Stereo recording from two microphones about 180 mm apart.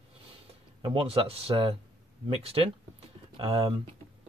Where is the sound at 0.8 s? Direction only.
30° right (ahead or behind).